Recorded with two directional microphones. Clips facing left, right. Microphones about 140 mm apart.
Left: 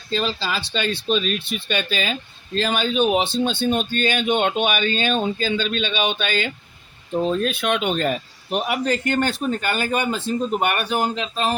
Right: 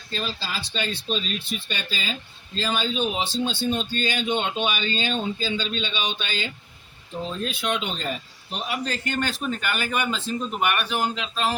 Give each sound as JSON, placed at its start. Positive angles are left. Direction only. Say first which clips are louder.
{"t": 0.1, "sound": "speech", "louder": "left 7 dB", "side_deg": 80}
{"t": 9.6, "sound": "a man's voice", "louder": "left 3 dB", "side_deg": 35}